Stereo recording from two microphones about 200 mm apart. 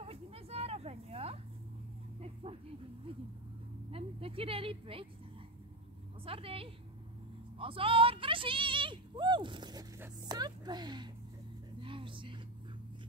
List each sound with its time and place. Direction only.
0.0 s a sound: 30° right (ahead or behind)
3.9 s speech: 30° right (ahead or behind)
6.2 s speech: 30° right (ahead or behind)